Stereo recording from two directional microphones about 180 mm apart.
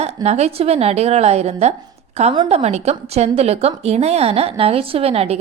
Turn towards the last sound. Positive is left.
turn(degrees=-35)  # may be behind; listen again after turning